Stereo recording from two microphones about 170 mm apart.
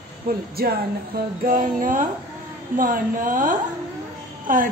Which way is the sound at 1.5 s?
50° right (ahead or behind).